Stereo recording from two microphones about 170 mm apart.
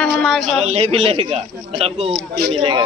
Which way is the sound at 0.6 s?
35° right (ahead or behind).